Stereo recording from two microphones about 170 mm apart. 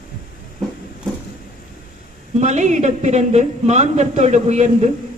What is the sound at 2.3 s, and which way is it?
A woman's voice, 45° right (ahead or behind).